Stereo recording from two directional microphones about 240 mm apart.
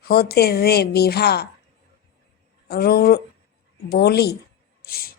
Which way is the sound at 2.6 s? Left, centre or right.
Left.